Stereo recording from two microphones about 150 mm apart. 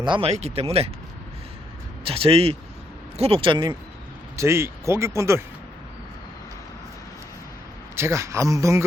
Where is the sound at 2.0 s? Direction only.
35° right (ahead or behind).